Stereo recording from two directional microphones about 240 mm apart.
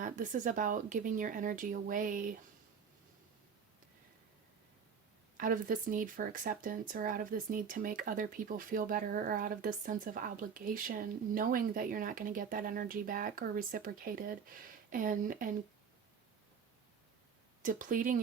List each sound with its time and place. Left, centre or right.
0.0 s speech: right
5.4 s speech: right
17.6 s speech: right